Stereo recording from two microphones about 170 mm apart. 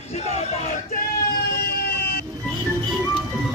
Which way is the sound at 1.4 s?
65° left (ahead or behind).